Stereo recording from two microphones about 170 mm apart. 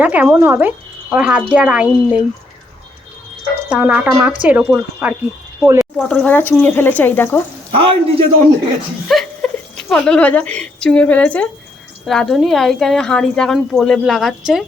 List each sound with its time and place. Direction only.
0.0 s speech: 10° right (ahead or behind)
3.7 s speech: 10° right (ahead or behind)
5.8 s speech: 5° left (ahead or behind)
7.8 s a man's voice: 35° right (ahead or behind)
9.0 s a woman's voice: centre (ahead or behind)